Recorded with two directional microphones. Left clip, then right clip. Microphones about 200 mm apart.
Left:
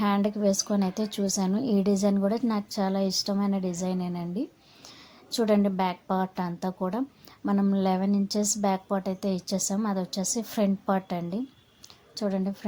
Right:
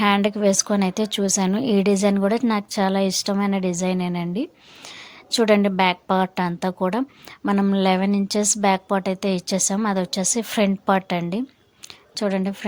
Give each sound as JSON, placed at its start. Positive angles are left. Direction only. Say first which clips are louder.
{"t": 0.0, "sound": "a woman's voice", "louder": "right 7 dB", "side_deg": -25}